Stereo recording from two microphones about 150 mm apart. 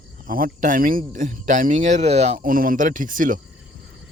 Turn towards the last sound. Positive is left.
turn(degrees=-65)  # may be behind; listen again after turning